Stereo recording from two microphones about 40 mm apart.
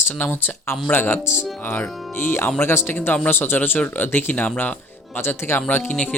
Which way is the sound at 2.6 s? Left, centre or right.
Left.